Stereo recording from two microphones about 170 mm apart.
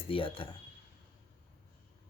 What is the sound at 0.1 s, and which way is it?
Speech, 30° left (ahead or behind).